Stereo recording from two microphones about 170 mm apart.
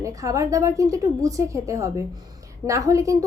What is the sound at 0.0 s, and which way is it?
A woman's voice, 20° right (ahead or behind).